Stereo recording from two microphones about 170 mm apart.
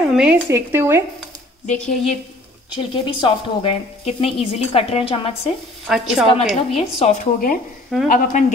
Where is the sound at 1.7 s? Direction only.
5° left (ahead or behind).